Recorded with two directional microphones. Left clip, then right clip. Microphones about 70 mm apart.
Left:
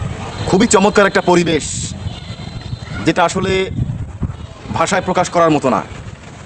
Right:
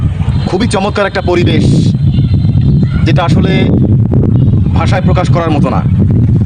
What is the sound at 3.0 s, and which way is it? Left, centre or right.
Speech, left.